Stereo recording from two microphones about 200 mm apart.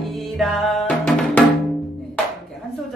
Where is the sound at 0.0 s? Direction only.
Centre (ahead or behind).